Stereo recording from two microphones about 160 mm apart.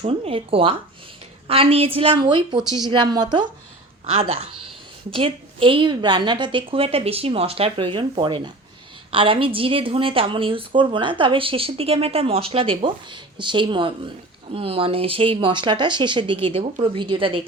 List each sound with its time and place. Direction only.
0.0 s a woman's voice: 35° right (ahead or behind)